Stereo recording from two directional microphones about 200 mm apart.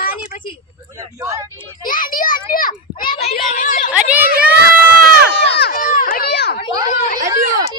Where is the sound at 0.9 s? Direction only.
15° right (ahead or behind).